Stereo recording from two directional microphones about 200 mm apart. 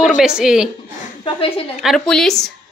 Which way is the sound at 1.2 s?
25° left (ahead or behind).